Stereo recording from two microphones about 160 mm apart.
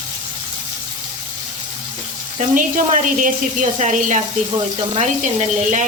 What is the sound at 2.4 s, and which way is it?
Speech, 55° right (ahead or behind).